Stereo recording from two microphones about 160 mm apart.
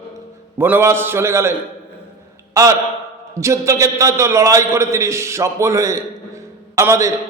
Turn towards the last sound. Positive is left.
turn(degrees=-20)  # may be behind; listen again after turning